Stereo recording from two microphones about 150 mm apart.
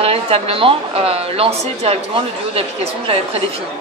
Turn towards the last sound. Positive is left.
turn(degrees=-40)  # may be behind; listen again after turning